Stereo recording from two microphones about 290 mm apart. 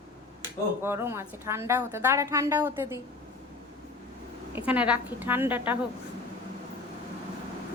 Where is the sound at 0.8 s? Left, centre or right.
Centre.